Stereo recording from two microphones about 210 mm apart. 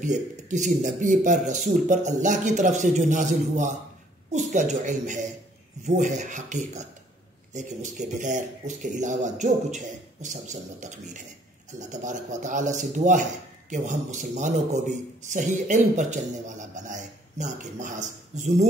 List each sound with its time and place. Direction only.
0.0 s a man's voice: 35° right (ahead or behind)